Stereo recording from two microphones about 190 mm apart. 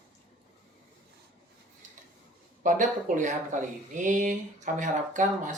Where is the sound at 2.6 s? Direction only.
40° right (ahead or behind).